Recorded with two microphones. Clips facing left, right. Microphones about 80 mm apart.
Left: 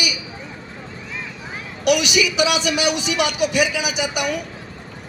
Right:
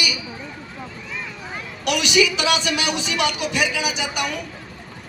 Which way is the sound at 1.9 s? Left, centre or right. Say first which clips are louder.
Left 1 dB; centre.